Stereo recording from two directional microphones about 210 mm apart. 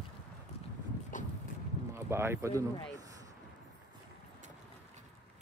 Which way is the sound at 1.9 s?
10° right (ahead or behind).